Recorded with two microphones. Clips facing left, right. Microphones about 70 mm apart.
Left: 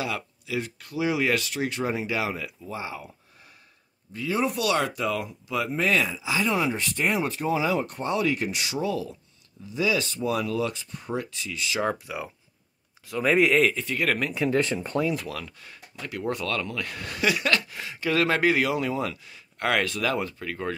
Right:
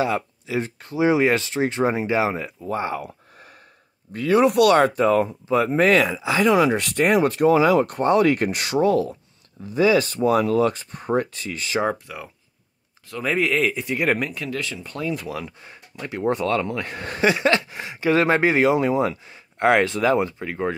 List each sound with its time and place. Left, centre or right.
0.0 s speech: right
2.6 s speech: right
4.7 s speech: right
5.7 s speech: right
6.5 s speech: right
12.1 s speech: centre
13.7 s speech: centre
14.3 s speech: centre
14.6 s speech: left
15.0 s speech: centre
15.2 s speech: centre